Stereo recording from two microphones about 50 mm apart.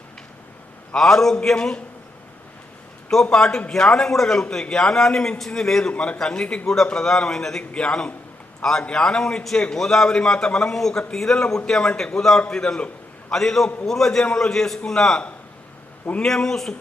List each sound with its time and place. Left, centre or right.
0.9 s a man's voice: centre
3.1 s a man's voice: centre
7.7 s a man's voice: centre
16.2 s a man's voice: centre